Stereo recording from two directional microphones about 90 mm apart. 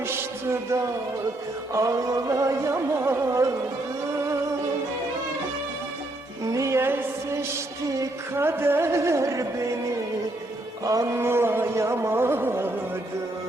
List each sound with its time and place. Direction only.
0.5 s music: 35° right (ahead or behind)
6.4 s music: 35° right (ahead or behind)
10.8 s music: 40° right (ahead or behind)